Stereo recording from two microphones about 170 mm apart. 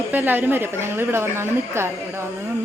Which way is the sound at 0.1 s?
10° right (ahead or behind).